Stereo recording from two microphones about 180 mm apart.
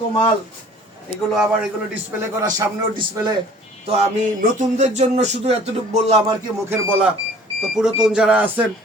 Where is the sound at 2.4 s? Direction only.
20° right (ahead or behind).